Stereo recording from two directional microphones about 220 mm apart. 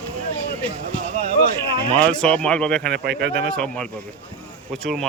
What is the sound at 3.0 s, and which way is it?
Speech, 50° right (ahead or behind).